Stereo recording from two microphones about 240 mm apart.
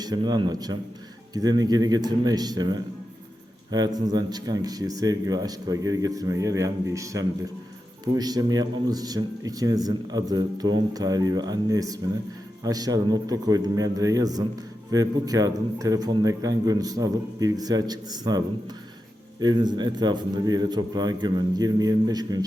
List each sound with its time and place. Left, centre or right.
0.0 s speech: centre